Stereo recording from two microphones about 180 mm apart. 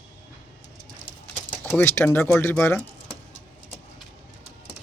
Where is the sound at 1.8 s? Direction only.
15° left (ahead or behind).